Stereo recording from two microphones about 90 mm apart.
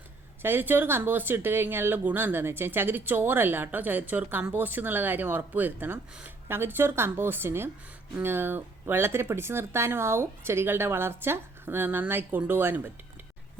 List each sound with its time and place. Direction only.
0.4 s a woman's voice: 25° right (ahead or behind)